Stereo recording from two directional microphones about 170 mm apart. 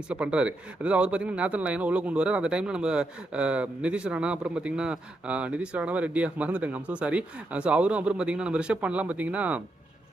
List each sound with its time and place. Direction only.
0.1 s speech: 5° right (ahead or behind)